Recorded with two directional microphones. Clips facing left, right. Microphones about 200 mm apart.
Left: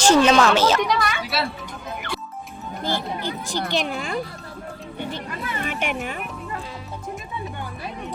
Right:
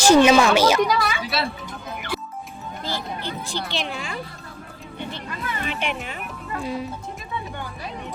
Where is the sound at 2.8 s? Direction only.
50° left (ahead or behind).